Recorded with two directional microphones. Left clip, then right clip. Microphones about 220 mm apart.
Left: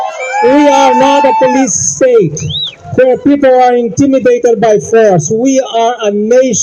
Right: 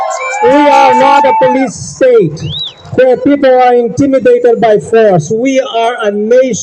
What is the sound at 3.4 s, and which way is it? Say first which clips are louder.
Speech: even; 10° left (ahead or behind).